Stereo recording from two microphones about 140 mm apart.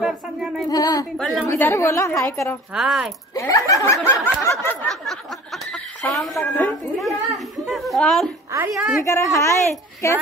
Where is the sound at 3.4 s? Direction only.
25° left (ahead or behind).